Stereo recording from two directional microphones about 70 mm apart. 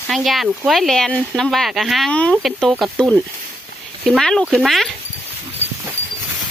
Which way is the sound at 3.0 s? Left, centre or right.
Centre.